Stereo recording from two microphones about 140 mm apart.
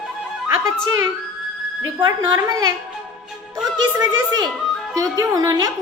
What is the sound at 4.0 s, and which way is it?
A woman's voice, 30° right (ahead or behind).